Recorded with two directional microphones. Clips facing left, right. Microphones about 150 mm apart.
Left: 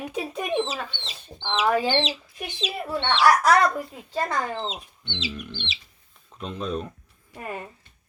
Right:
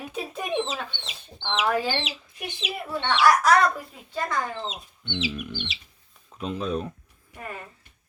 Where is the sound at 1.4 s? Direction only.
20° left (ahead or behind).